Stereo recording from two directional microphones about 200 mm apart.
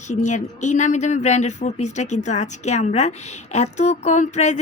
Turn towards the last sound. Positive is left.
turn(degrees=35)  # may be behind; listen again after turning